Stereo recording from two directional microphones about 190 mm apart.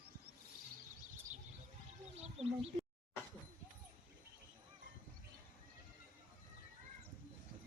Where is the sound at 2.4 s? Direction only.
30° right (ahead or behind).